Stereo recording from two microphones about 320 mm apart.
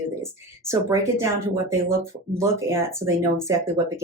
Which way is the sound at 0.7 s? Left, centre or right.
Centre.